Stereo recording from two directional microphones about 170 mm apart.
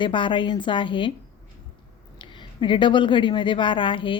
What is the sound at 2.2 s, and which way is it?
A woman's voice, 30° left (ahead or behind).